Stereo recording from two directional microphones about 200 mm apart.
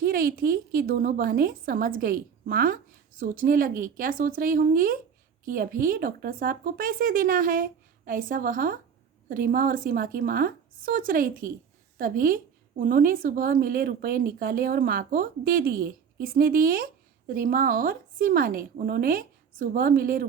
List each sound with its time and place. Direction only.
0.0 s a woman's voice: 45° right (ahead or behind)